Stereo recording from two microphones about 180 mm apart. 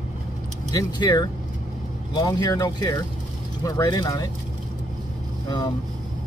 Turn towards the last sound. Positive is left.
turn(degrees=25)  # may be behind; listen again after turning